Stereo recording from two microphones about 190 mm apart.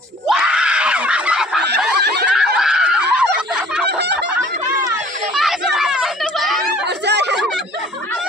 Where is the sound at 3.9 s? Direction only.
60° right (ahead or behind).